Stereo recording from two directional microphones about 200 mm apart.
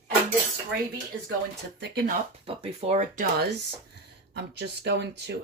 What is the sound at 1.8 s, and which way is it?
Speech, 55° right (ahead or behind).